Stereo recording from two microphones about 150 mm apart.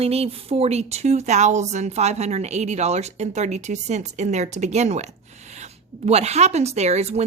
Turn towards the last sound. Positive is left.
turn(degrees=-45)  # may be behind; listen again after turning